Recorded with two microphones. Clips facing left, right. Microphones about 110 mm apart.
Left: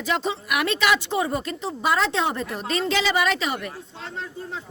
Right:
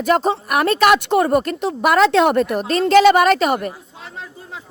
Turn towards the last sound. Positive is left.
turn(degrees=-50)  # may be behind; listen again after turning